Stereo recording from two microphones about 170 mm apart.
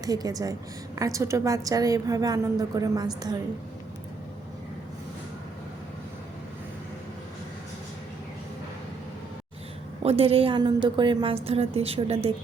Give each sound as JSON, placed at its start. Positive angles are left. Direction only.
{"t": 0.0, "sound": "a woman's voice", "side_deg": -20}
{"t": 10.0, "sound": "a woman's voice", "side_deg": -35}